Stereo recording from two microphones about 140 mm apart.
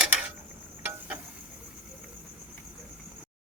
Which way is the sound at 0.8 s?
10° right (ahead or behind).